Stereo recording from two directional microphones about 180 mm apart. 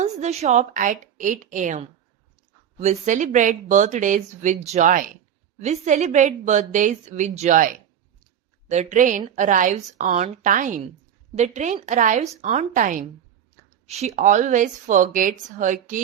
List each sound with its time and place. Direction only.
0.0 s a woman's voice: 40° right (ahead or behind)